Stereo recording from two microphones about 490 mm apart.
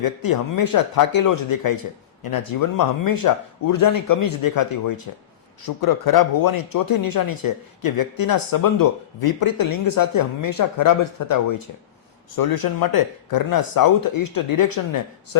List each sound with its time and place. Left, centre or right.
0.0 s speech: left